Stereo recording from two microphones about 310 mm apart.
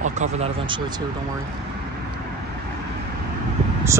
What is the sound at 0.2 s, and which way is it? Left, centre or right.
Speech, centre.